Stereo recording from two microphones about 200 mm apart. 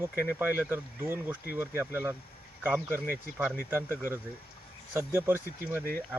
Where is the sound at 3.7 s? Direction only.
10° right (ahead or behind).